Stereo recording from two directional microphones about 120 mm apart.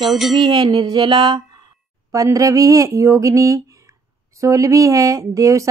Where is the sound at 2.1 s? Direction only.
25° right (ahead or behind).